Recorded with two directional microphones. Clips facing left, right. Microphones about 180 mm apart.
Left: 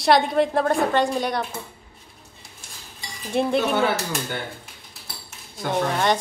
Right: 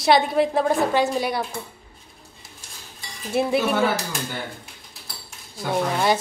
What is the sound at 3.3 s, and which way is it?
Speech, 5° right (ahead or behind).